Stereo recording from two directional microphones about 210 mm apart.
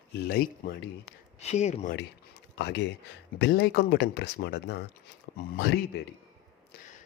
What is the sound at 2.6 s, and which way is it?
Speech, 55° left (ahead or behind).